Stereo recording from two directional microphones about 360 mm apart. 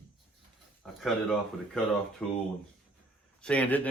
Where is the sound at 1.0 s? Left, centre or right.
Centre.